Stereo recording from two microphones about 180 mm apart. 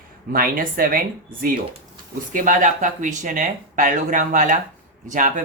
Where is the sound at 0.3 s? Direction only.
50° right (ahead or behind).